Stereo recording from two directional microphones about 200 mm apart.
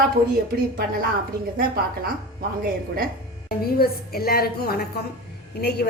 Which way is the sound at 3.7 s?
50° left (ahead or behind).